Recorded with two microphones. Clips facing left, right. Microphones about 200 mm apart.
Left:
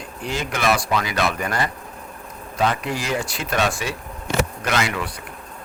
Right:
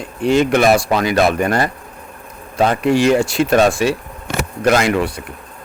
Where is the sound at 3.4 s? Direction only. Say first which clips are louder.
Right 13 dB; 55° right (ahead or behind).